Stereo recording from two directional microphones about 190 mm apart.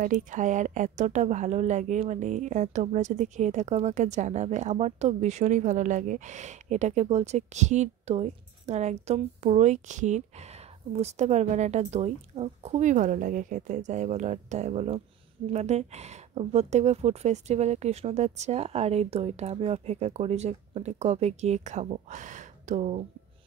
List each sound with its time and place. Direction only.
0.0 s a woman's voice: 40° right (ahead or behind)